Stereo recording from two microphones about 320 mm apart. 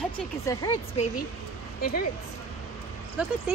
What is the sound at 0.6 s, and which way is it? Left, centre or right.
Speech, centre.